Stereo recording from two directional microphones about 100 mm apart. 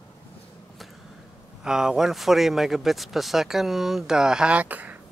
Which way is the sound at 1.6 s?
5° right (ahead or behind).